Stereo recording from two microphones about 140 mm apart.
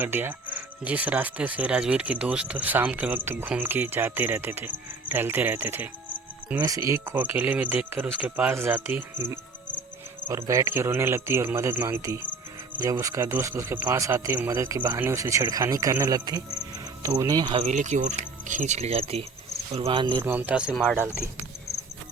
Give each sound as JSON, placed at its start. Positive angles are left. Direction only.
{"t": 0.0, "sound": "speech", "side_deg": -15}
{"t": 17.7, "sound": "speech", "side_deg": -60}
{"t": 20.2, "sound": "speech", "side_deg": -15}